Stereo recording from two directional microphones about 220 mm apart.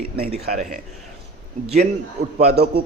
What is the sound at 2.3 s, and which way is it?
Speech, 45° right (ahead or behind).